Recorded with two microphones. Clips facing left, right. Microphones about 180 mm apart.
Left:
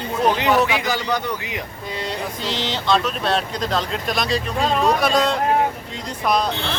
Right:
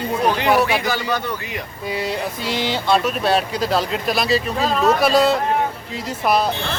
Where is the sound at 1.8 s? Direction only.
10° right (ahead or behind).